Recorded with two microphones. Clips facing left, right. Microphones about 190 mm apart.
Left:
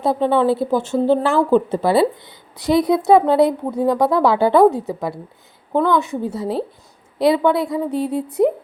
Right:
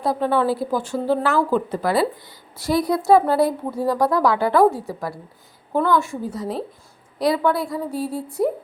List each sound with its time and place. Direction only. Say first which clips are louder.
0.0 s speech: left 4 dB; 25° left (ahead or behind)